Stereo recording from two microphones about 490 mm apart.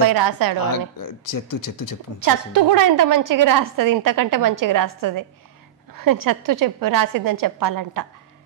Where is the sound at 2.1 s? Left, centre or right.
Right.